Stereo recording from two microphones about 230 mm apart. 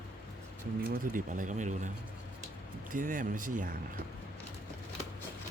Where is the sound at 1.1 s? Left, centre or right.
Right.